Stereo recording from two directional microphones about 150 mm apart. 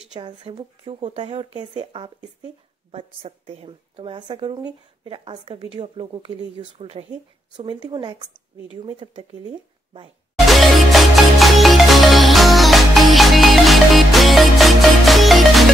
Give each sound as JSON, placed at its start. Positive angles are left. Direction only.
{"t": 0.4, "sound": "speech", "side_deg": -40}
{"t": 10.5, "sound": "music", "side_deg": 0}